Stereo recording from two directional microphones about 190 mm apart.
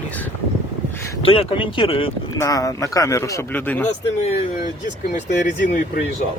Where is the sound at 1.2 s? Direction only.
30° left (ahead or behind).